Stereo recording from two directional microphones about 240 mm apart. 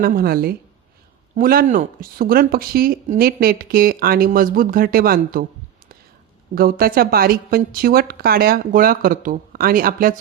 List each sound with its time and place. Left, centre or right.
0.0 s speech: right
6.5 s speech: right